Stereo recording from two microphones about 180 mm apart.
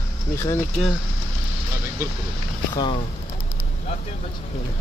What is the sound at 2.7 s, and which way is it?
Speech, 25° left (ahead or behind).